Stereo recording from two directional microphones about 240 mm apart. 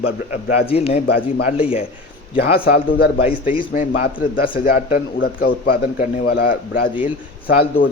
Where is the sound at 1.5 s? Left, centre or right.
Centre.